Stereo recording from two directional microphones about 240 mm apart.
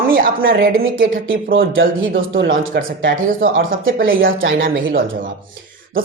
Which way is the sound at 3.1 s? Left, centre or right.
Right.